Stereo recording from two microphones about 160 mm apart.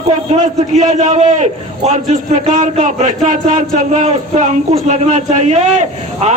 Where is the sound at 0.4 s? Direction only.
50° right (ahead or behind).